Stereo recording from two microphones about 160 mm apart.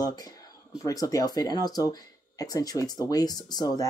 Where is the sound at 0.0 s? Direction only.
25° left (ahead or behind).